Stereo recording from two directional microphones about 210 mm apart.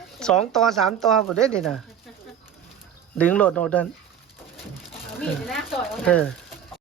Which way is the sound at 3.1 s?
5° left (ahead or behind).